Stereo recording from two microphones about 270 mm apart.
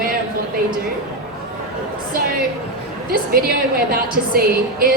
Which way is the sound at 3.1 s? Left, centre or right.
Right.